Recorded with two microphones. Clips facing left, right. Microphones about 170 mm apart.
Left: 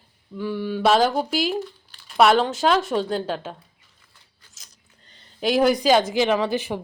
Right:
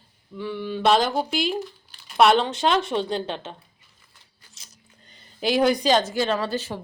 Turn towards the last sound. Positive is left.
turn(degrees=15)  # may be behind; listen again after turning